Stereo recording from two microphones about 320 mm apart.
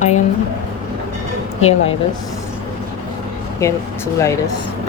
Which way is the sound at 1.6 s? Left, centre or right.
Centre.